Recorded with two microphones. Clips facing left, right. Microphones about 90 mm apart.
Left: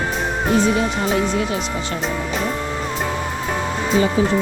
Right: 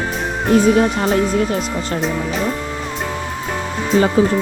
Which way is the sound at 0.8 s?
45° right (ahead or behind).